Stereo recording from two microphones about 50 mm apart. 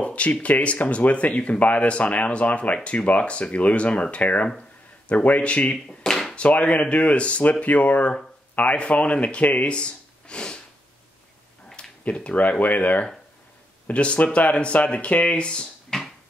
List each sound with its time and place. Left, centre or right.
0.0 s speech: left
5.9 s chop: centre
6.3 s speech: left
12.0 s speech: left
15.9 s a sound: centre